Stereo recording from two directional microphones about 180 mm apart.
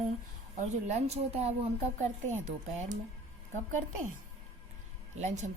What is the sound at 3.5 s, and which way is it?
Speech, 45° right (ahead or behind).